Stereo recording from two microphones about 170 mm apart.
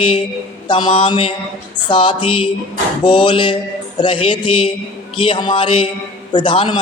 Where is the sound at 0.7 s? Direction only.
30° left (ahead or behind).